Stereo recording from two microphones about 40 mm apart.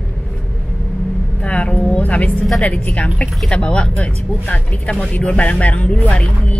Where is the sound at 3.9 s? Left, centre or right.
Left.